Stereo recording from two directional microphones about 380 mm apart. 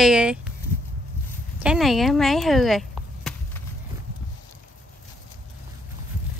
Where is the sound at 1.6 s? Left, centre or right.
Centre.